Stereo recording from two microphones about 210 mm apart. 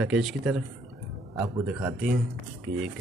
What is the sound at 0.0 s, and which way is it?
Speech, centre (ahead or behind).